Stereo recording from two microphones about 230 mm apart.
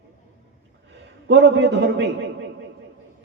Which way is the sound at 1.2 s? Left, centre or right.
Right.